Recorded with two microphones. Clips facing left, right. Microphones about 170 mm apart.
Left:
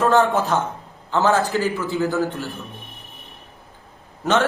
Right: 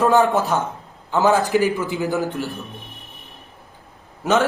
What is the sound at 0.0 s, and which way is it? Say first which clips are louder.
A man's voice: right 1 dB; 15° right (ahead or behind).